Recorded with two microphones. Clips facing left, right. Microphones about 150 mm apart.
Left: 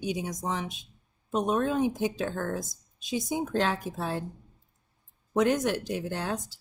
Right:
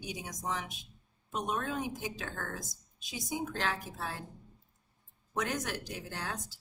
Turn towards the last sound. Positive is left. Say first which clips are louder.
# left 9 dB
turn(degrees=25)  # may be behind; listen again after turning